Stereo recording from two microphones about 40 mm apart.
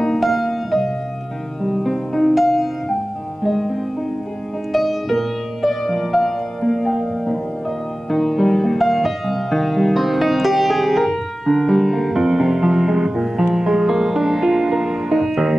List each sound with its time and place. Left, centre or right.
0.0 s music: centre
4.7 s music: centre